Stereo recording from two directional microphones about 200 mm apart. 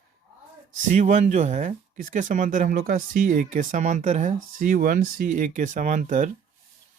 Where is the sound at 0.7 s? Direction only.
40° right (ahead or behind).